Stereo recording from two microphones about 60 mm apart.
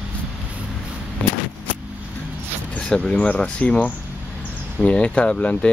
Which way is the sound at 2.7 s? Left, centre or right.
Centre.